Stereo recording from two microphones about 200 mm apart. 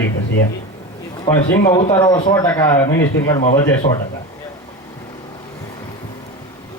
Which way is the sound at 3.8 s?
30° left (ahead or behind).